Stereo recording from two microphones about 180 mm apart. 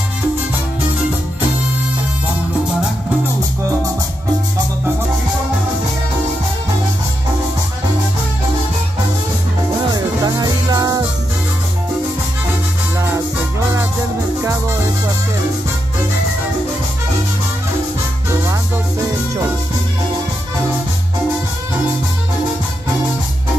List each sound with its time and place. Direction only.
9.8 s music: 20° right (ahead or behind)